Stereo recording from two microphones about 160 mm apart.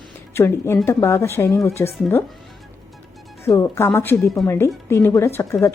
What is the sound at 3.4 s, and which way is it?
Speech, 15° left (ahead or behind).